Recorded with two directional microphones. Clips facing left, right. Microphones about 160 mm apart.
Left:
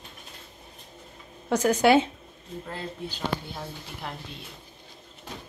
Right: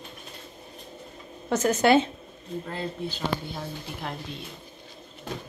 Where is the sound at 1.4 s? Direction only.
10° left (ahead or behind).